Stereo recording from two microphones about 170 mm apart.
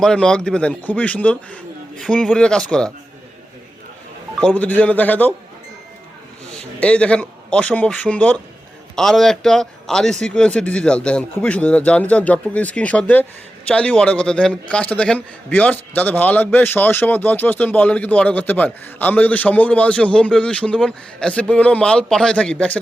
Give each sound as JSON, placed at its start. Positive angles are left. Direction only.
{"t": 0.0, "sound": "speech", "side_deg": 5}
{"t": 4.4, "sound": "speech", "side_deg": 5}
{"t": 6.5, "sound": "a man's voice", "side_deg": 5}